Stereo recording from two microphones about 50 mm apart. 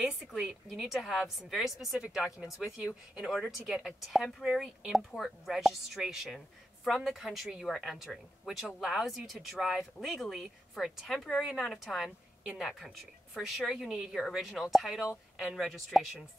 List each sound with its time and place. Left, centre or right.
0.0 s a woman's voice: centre
3.3 s a woman's voice: centre
7.6 s a woman's voice: centre
8.6 s a woman's voice: centre
10.2 s a woman's voice: centre
10.8 s a woman's voice: centre